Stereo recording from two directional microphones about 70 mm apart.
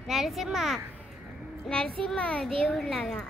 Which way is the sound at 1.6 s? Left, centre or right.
Centre.